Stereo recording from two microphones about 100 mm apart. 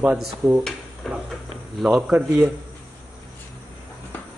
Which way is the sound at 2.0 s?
10° right (ahead or behind).